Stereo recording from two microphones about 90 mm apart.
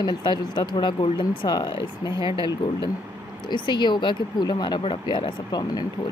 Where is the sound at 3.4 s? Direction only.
55° left (ahead or behind).